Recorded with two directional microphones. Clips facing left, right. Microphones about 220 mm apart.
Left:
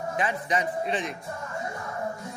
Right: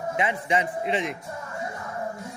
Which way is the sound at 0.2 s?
25° right (ahead or behind).